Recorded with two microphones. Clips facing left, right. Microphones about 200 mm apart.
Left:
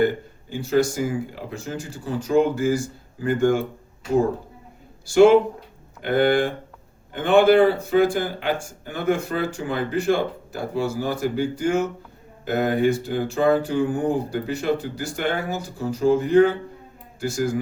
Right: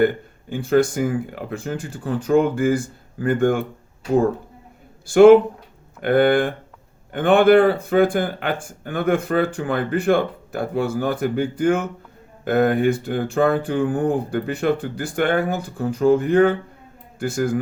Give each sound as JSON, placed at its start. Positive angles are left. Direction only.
{"t": 0.5, "sound": "speech", "side_deg": -55}
{"t": 5.0, "sound": "speech", "side_deg": -55}